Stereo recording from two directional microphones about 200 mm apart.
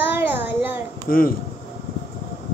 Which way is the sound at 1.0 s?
45° left (ahead or behind).